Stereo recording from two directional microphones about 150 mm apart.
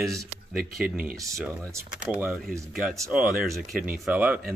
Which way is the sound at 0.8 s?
70° right (ahead or behind).